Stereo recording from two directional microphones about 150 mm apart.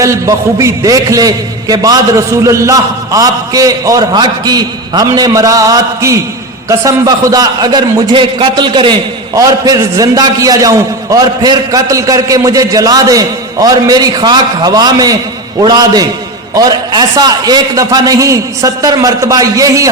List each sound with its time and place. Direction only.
0.0 s a man's voice: 20° right (ahead or behind)